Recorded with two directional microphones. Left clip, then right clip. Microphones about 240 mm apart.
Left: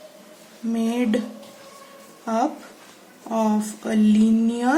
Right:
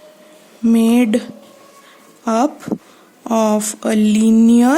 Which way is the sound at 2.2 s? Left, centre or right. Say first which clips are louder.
Right 7 dB; right.